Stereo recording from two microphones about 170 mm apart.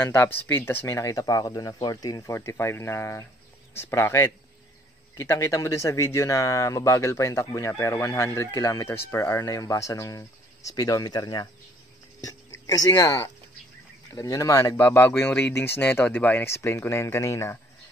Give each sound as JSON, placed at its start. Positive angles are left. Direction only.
{"t": 0.0, "sound": "speech", "side_deg": 15}
{"t": 12.6, "sound": "speech", "side_deg": 20}